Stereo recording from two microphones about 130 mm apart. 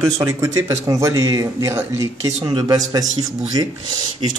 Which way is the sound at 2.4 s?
35° right (ahead or behind).